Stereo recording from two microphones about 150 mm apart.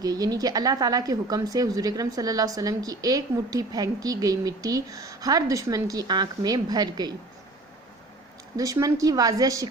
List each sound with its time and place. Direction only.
0.0 s a woman's voice: 25° right (ahead or behind)
8.5 s a woman's voice: 25° right (ahead or behind)